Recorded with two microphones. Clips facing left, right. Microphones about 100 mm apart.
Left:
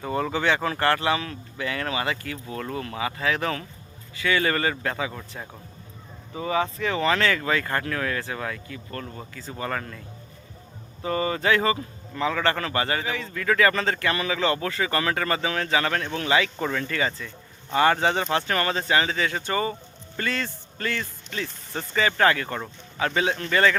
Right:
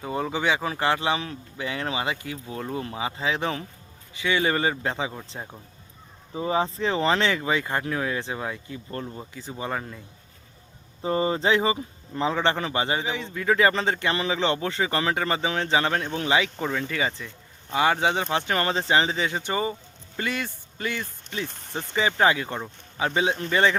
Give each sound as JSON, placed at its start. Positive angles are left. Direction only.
{"t": 0.0, "sound": "a man's voice", "side_deg": -10}
{"t": 11.0, "sound": "a man's voice", "side_deg": -25}
{"t": 12.1, "sound": "a man's voice", "side_deg": -25}
{"t": 16.6, "sound": "speech", "side_deg": -5}